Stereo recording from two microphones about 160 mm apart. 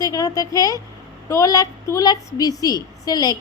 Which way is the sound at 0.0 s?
20° left (ahead or behind).